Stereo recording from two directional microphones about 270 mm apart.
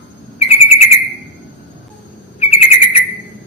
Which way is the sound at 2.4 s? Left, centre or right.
Left.